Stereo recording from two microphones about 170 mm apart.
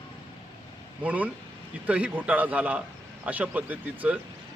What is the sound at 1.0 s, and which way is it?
A man's voice, 10° right (ahead or behind).